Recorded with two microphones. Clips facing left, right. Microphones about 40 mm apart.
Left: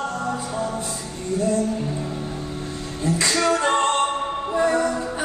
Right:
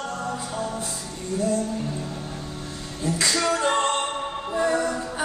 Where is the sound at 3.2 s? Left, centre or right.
Centre.